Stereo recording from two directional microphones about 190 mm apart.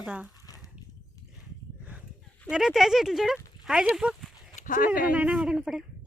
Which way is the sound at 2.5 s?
5° right (ahead or behind).